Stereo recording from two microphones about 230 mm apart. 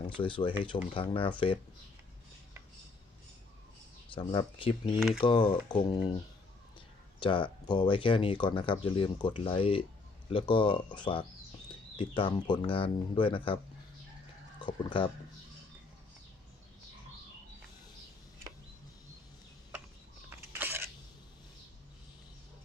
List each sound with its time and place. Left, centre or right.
0.2 s speech: left
4.1 s speech: left
14.6 s speech: left
20.3 s a sound: centre